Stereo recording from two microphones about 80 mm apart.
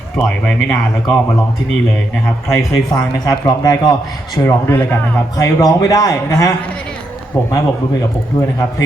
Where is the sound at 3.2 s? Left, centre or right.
Left.